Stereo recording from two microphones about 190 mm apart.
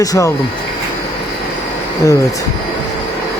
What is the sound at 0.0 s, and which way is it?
Speech, 15° left (ahead or behind).